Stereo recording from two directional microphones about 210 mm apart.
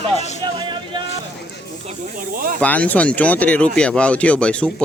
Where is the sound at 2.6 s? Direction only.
5° left (ahead or behind).